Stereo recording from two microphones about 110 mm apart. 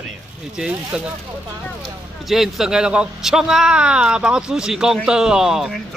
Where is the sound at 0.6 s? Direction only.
5° right (ahead or behind).